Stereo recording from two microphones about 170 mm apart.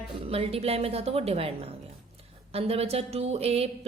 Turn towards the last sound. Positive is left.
turn(degrees=-35)  # may be behind; listen again after turning